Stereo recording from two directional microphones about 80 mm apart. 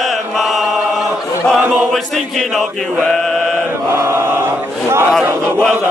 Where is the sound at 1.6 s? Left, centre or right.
Right.